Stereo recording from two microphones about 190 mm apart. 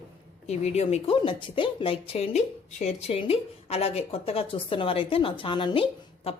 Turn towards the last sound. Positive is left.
turn(degrees=30)  # may be behind; listen again after turning